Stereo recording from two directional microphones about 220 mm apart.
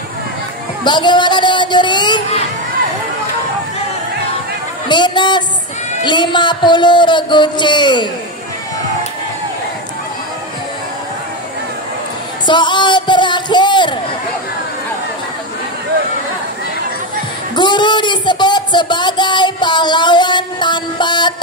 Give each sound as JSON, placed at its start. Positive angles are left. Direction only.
{"t": 0.8, "sound": "speech", "side_deg": 20}
{"t": 4.8, "sound": "a woman's voice", "side_deg": 20}
{"t": 12.4, "sound": "a man's voice", "side_deg": 20}
{"t": 17.6, "sound": "speech", "side_deg": 20}